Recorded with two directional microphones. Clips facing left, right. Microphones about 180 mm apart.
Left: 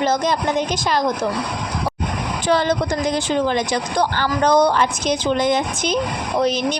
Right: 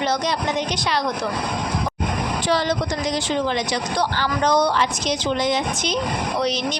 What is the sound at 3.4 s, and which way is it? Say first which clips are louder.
Speech: left 3 dB; 50° left (ahead or behind).